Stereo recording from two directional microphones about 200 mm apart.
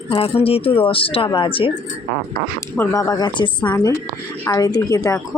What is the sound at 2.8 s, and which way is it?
Speech, 15° left (ahead or behind).